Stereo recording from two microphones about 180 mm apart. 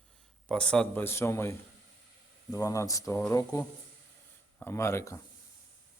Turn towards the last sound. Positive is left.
turn(degrees=15)  # may be behind; listen again after turning